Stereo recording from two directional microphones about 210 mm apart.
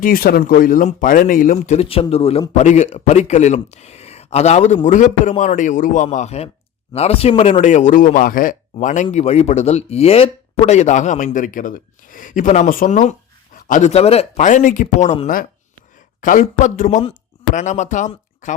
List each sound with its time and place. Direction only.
0.0 s speech: 45° left (ahead or behind)